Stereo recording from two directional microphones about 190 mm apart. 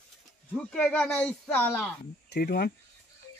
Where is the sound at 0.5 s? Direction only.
5° left (ahead or behind).